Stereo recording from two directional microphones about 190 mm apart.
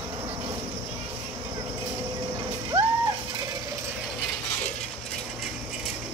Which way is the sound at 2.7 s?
30° right (ahead or behind).